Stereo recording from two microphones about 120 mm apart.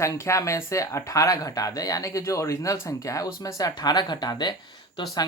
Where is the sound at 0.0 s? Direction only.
25° left (ahead or behind).